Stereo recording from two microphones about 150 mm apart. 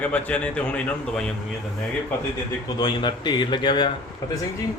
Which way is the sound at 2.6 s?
30° left (ahead or behind).